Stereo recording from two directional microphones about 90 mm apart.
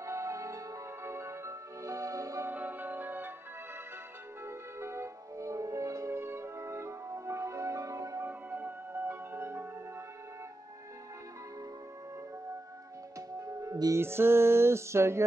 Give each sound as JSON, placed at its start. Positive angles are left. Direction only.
{"t": 0.0, "sound": "music", "side_deg": -35}
{"t": 2.5, "sound": "music", "side_deg": -20}
{"t": 4.5, "sound": "music", "side_deg": -30}
{"t": 8.3, "sound": "music", "side_deg": -20}
{"t": 13.4, "sound": "music", "side_deg": -35}
{"t": 13.9, "sound": "music", "side_deg": -25}